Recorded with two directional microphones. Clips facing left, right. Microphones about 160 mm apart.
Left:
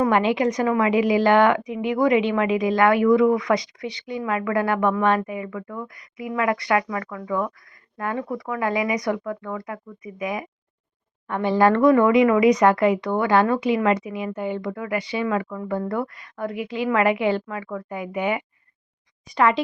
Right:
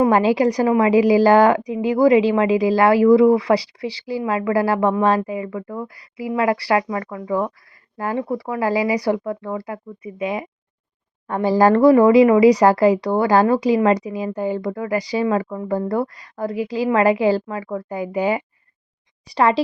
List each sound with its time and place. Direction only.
0.1 s speech: 35° right (ahead or behind)